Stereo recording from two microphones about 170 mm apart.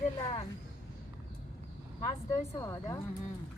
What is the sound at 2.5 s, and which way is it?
Speech, 20° left (ahead or behind).